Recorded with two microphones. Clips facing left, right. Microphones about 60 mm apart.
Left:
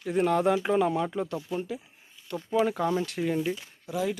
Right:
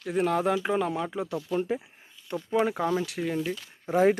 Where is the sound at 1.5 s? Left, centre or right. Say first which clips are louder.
Right 4 dB; right.